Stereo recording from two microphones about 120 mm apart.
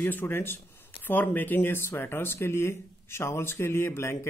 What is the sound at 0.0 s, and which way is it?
Speech, 15° left (ahead or behind).